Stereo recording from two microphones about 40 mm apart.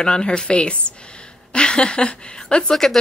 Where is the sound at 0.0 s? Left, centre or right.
Left.